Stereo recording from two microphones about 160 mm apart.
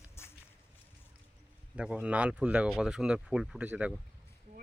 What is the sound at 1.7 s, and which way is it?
Speech, 5° right (ahead or behind).